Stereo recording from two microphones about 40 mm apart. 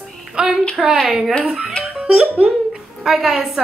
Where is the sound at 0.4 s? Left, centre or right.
Centre.